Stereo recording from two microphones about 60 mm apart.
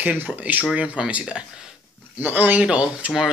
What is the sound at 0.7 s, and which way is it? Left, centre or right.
Speech, centre.